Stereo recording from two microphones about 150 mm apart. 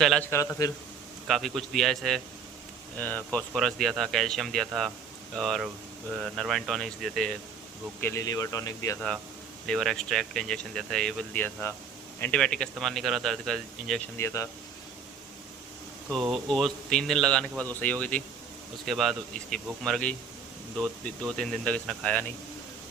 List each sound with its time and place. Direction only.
0.0 s a man's voice: 5° left (ahead or behind)
0.3 s a man's voice: 20° left (ahead or behind)
1.3 s a man's voice: centre (ahead or behind)
8.0 s speech: 20° left (ahead or behind)
9.0 s a man's voice: centre (ahead or behind)
14.2 s a man's voice: 20° left (ahead or behind)
16.0 s a man's voice: centre (ahead or behind)